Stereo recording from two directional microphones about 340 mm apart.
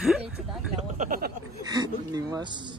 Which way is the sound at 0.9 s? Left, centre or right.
Right.